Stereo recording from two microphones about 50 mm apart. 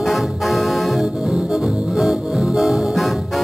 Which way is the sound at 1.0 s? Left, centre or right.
Centre.